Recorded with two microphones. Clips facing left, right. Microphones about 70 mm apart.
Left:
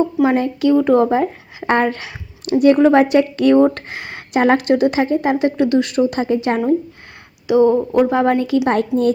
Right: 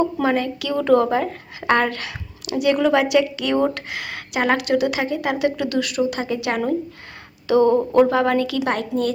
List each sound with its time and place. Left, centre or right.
0.3 s speech: left
0.8 s speech: centre
2.4 s speech: left
7.4 s speech: centre
8.6 s speech: left